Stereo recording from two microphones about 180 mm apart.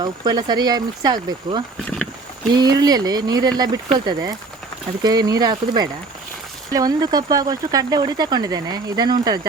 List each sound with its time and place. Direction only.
0.0 s speech: 20° right (ahead or behind)